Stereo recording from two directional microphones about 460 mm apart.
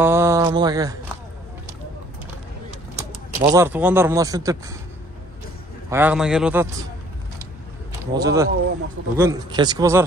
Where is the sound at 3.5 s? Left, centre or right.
Centre.